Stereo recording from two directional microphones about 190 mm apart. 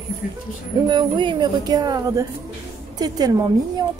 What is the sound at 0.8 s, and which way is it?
A woman's voice, 25° right (ahead or behind).